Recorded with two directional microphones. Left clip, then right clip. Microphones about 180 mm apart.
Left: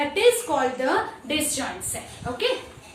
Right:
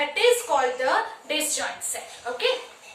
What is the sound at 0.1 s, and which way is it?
A woman's voice, 20° left (ahead or behind).